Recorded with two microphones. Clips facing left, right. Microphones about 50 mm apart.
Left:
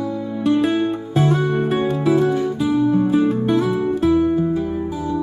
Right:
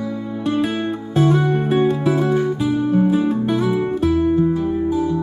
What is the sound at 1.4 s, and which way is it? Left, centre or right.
Music, centre.